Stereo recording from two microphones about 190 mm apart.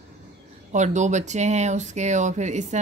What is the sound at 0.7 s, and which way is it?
Speech, 40° right (ahead or behind).